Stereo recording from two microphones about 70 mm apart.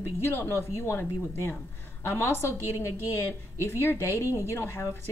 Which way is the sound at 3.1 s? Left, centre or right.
Left.